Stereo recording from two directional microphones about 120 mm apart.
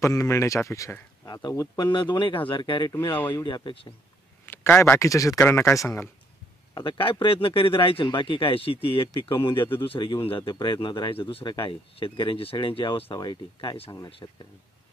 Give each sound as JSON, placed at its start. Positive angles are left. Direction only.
{"t": 0.0, "sound": "speech", "side_deg": 25}
{"t": 4.5, "sound": "speech", "side_deg": 15}
{"t": 6.7, "sound": "speech", "side_deg": 40}
{"t": 13.1, "sound": "speech", "side_deg": 35}
{"t": 14.2, "sound": "speech", "side_deg": 30}